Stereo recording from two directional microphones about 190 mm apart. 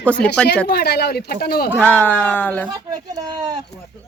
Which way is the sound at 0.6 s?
55° left (ahead or behind).